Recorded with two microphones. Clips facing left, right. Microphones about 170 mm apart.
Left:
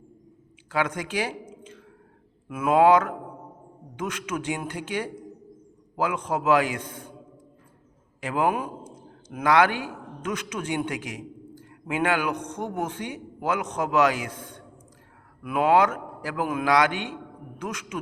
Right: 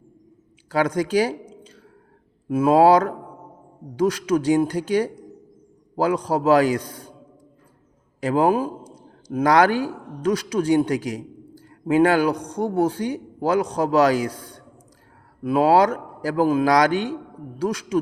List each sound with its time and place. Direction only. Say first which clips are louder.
0.7 s a man's voice: right 7 dB; 35° right (ahead or behind)
8.2 s a man's voice: right 6 dB; 35° right (ahead or behind)